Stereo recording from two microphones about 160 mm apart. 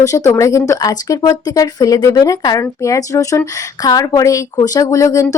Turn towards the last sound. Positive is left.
turn(degrees=20)  # may be behind; listen again after turning